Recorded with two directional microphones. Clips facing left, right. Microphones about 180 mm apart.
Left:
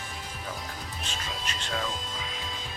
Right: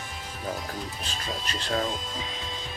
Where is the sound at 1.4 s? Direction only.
35° right (ahead or behind).